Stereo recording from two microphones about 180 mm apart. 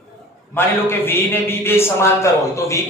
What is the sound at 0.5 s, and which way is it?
A man's voice, 10° left (ahead or behind).